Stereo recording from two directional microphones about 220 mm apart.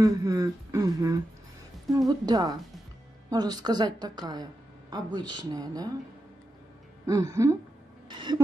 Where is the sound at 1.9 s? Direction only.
15° right (ahead or behind).